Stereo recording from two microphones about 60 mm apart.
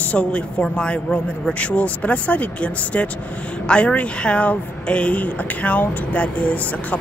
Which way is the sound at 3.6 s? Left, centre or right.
Centre.